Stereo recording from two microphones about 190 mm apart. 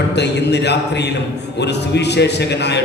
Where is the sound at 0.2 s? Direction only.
65° left (ahead or behind).